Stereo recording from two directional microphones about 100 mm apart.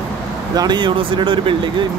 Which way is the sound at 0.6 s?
45° right (ahead or behind).